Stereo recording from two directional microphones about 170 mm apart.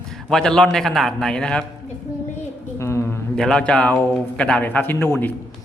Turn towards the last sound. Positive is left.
turn(degrees=10)  # may be behind; listen again after turning